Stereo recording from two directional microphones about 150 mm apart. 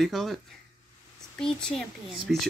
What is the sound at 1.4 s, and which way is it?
Speech, 5° left (ahead or behind).